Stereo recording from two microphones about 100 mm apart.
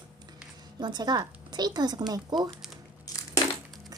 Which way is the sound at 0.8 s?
45° right (ahead or behind).